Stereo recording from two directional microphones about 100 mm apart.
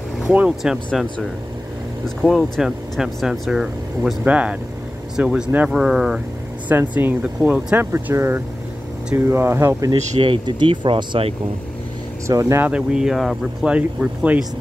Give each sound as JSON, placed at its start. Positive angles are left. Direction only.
{"t": 0.3, "sound": "speech", "side_deg": -15}
{"t": 0.9, "sound": "speech", "side_deg": 0}
{"t": 4.2, "sound": "speech", "side_deg": -15}
{"t": 5.7, "sound": "speech", "side_deg": -5}
{"t": 6.7, "sound": "speech", "side_deg": -20}
{"t": 10.2, "sound": "speech", "side_deg": -50}
{"t": 12.3, "sound": "speech", "side_deg": -30}
{"t": 12.6, "sound": "speech", "side_deg": -10}
{"t": 13.7, "sound": "speech", "side_deg": -15}